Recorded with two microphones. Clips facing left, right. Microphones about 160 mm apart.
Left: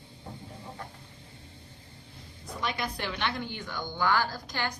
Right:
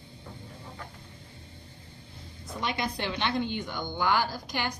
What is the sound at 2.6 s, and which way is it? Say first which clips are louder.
A woman's voice: right 2 dB; 25° right (ahead or behind).